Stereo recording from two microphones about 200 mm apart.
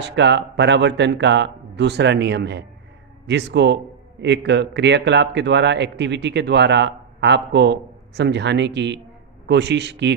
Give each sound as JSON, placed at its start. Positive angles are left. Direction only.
{"t": 0.0, "sound": "speech", "side_deg": -60}